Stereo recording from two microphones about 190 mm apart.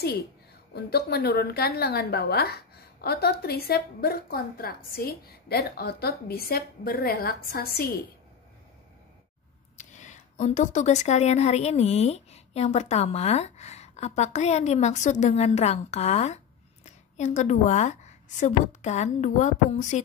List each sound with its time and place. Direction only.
0.7 s a woman's voice: 55° left (ahead or behind)
9.8 s a woman's voice: 40° left (ahead or behind)